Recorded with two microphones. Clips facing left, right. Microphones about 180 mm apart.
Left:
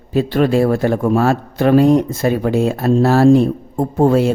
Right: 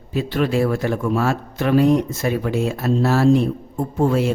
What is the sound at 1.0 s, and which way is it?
Speech, 55° left (ahead or behind).